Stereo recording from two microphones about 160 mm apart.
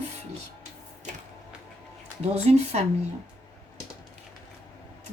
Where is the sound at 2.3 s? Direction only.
40° right (ahead or behind).